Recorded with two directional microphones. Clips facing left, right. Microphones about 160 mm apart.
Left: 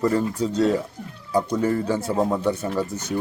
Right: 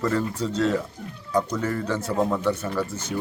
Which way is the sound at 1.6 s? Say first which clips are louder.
Left 4 dB; 25° left (ahead or behind).